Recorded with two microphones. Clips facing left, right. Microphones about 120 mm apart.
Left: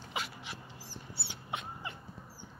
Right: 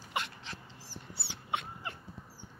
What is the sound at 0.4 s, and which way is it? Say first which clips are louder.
Dog: left 1 dB; 15° left (ahead or behind).